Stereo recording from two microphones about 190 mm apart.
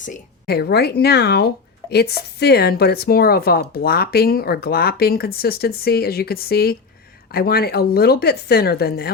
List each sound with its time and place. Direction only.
0.0 s speech: 50° left (ahead or behind)